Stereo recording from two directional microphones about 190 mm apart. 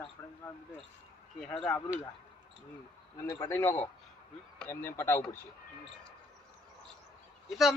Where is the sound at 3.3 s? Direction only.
15° left (ahead or behind).